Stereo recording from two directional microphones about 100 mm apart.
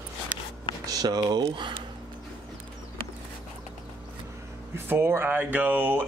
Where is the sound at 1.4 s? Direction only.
60° right (ahead or behind).